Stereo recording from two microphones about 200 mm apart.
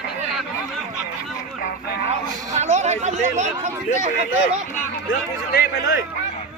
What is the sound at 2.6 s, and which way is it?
Chatter, 35° right (ahead or behind).